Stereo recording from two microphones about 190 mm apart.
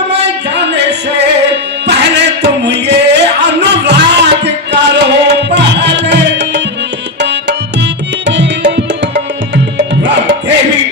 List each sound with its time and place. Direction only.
0.1 s music: 65° right (ahead or behind)
7.2 s tabla: 65° right (ahead or behind)
8.3 s music: 65° right (ahead or behind)